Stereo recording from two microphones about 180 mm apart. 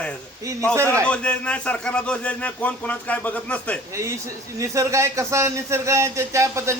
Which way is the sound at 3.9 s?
15° right (ahead or behind).